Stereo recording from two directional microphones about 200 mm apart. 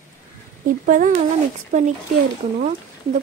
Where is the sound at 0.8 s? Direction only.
40° right (ahead or behind).